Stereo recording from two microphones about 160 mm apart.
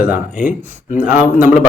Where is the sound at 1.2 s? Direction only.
10° right (ahead or behind).